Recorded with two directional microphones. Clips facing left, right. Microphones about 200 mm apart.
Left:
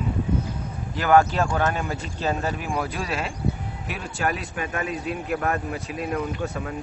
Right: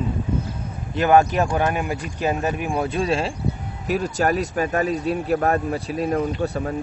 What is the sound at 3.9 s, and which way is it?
Speech, 40° right (ahead or behind).